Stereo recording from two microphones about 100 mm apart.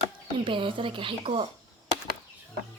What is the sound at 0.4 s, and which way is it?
Speech, 60° right (ahead or behind).